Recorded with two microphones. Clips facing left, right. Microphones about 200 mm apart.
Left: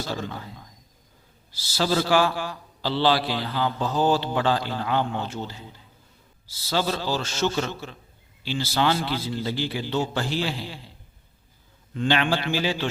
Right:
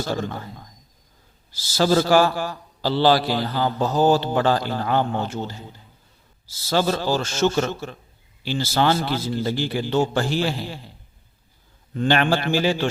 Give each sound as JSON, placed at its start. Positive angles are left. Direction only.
{"t": 0.0, "sound": "a man's voice", "side_deg": -50}
{"t": 11.9, "sound": "a man's voice", "side_deg": -50}